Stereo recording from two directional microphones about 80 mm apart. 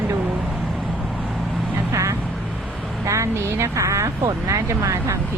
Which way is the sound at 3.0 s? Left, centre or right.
Right.